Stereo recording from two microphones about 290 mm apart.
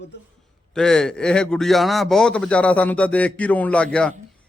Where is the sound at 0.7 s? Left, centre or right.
Centre.